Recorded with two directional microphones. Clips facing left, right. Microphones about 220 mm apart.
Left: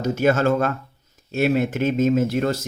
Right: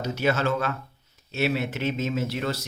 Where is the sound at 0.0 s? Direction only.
50° left (ahead or behind).